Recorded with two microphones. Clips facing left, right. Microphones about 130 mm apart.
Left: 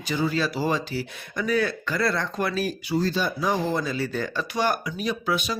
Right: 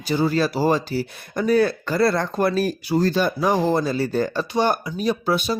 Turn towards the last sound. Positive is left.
turn(degrees=-35)  # may be behind; listen again after turning